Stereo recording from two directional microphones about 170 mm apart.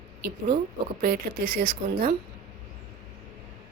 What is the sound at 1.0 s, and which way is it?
Speech, 55° right (ahead or behind).